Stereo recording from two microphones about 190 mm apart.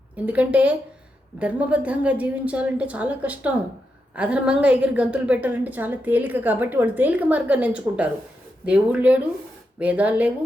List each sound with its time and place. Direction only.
0.3 s a woman's voice: 5° right (ahead or behind)